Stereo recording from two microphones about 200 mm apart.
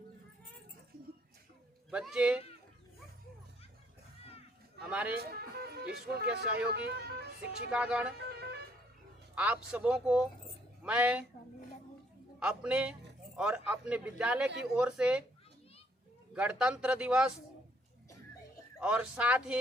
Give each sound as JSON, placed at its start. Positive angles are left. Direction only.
{"t": 1.9, "sound": "a man's voice", "side_deg": -5}
{"t": 4.8, "sound": "a man's voice", "side_deg": -5}
{"t": 5.1, "sound": "speech", "side_deg": -50}
{"t": 7.7, "sound": "a man's voice", "side_deg": -5}
{"t": 9.3, "sound": "a man's voice", "side_deg": -5}
{"t": 12.4, "sound": "a man's voice", "side_deg": -5}
{"t": 16.3, "sound": "a man's voice", "side_deg": -5}
{"t": 18.8, "sound": "a man's voice", "side_deg": -5}